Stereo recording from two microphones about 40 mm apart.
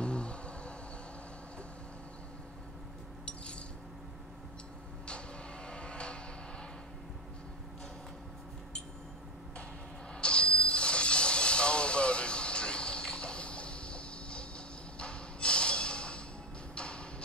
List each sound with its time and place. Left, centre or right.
0.0 s insect: left
5.7 s vehicle: left
10.1 s a sound: left
16.7 s music: left